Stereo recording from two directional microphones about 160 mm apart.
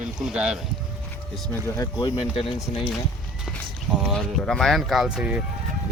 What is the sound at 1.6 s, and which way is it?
Speech, 20° left (ahead or behind).